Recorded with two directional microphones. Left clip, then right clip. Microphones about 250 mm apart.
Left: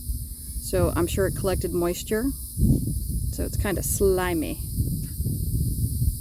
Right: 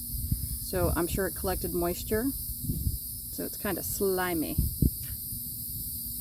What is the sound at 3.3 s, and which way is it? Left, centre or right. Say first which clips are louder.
Speech: left 5 dB; left.